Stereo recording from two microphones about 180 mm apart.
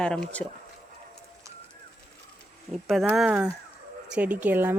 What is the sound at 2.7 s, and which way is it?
Speech, centre (ahead or behind).